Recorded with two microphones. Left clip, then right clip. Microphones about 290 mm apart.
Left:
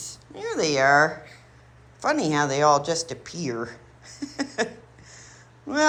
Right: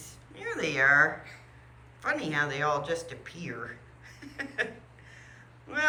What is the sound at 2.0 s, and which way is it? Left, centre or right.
A woman's voice, centre.